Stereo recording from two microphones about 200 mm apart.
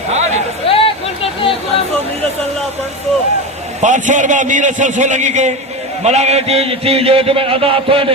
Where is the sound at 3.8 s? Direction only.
40° right (ahead or behind).